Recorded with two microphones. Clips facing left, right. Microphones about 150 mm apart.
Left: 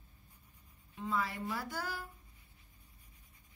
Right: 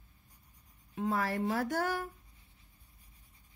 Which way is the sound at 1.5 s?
70° right (ahead or behind).